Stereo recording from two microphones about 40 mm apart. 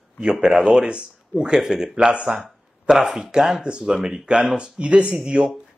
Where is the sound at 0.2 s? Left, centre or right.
Right.